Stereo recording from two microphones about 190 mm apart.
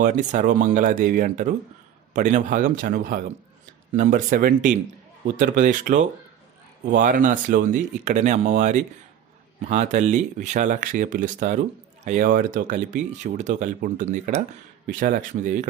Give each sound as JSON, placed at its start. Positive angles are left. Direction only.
{"t": 0.0, "sound": "speech", "side_deg": -40}